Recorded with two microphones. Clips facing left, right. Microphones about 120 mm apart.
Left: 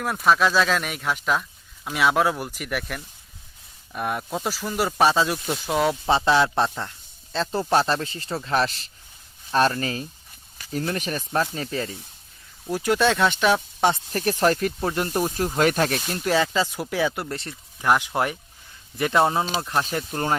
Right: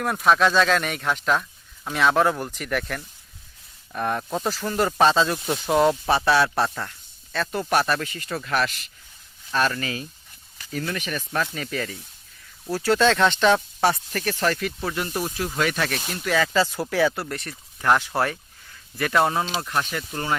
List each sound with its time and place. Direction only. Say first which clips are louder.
0.0 s speech: right 1 dB; centre (ahead or behind)
5.5 s speech: right 3 dB; centre (ahead or behind)
6.1 s speech: even; 20° left (ahead or behind); by 11.3 s 40° left (ahead or behind)
11.5 s speech: left 1 dB; 30° left (ahead or behind)
12.7 s speech: right 1 dB; 15° left (ahead or behind)
13.9 s speech: left 3 dB; 30° left (ahead or behind)
16.5 s speech: right 2 dB; 15° left (ahead or behind)
17.8 s speech: even; 15° left (ahead or behind); by 20.4 s 35° left (ahead or behind)